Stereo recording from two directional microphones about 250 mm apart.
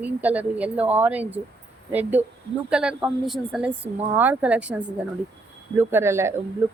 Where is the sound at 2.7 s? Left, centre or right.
Centre.